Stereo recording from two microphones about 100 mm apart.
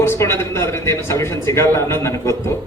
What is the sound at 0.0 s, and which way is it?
A man's voice, 25° left (ahead or behind).